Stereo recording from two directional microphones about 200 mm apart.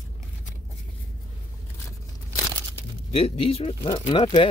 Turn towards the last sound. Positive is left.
turn(degrees=30)  # may be behind; listen again after turning